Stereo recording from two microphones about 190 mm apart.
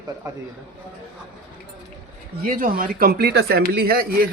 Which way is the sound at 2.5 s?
45° right (ahead or behind).